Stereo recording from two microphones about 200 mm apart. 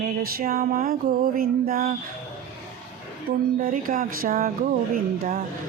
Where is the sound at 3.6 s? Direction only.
45° right (ahead or behind).